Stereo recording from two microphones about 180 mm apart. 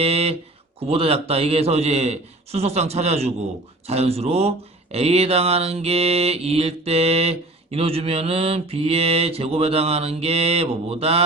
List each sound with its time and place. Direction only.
0.0 s speech: 35° right (ahead or behind)